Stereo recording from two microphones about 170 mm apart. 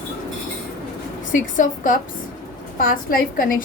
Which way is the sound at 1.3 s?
50° left (ahead or behind).